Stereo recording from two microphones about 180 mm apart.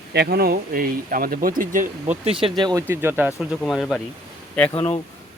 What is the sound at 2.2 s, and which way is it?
Speech, 30° right (ahead or behind).